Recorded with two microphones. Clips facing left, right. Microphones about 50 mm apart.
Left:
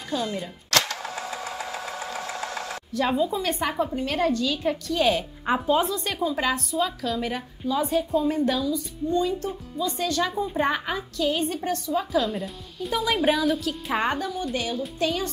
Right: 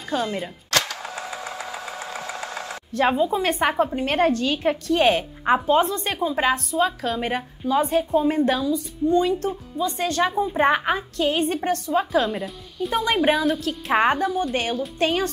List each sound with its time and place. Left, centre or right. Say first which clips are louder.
0.1 s a woman's voice: right 3 dB; right
0.4 s a sound: right 1 dB; centre
2.0 s engine: even; centre
2.9 s a woman's voice: right 4 dB; right
5.4 s a woman's voice: right 5 dB; right
12.4 s speech: right 4 dB; centre
13.1 s a woman's voice: right 2 dB; centre
13.4 s speech: right 2 dB; centre
13.9 s a woman's voice: right 7 dB; right
14.5 s speech: right 3 dB; right